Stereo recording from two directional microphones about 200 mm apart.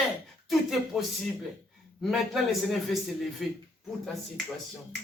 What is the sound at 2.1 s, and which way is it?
Speech, centre (ahead or behind).